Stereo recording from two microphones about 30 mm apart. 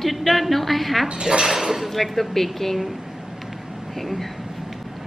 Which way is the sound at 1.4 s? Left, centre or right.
Centre.